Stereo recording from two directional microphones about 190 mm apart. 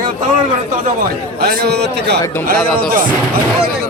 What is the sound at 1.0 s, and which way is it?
A man's voice, 50° right (ahead or behind).